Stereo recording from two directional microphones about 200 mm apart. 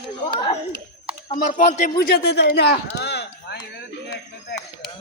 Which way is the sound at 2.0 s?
55° left (ahead or behind).